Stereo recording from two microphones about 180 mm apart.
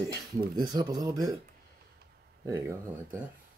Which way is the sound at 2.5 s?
15° right (ahead or behind).